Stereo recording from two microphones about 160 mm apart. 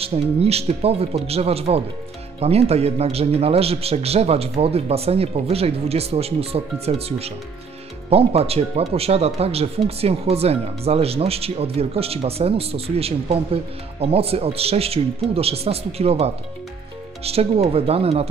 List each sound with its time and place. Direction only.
0.0 s speech: 40° right (ahead or behind)